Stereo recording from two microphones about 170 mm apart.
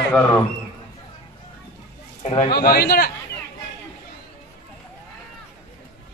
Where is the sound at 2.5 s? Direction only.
65° left (ahead or behind).